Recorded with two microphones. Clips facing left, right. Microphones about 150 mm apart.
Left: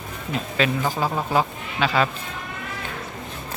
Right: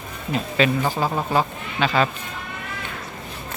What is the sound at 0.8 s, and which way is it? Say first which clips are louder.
Speech: right 1 dB; 15° right (ahead or behind).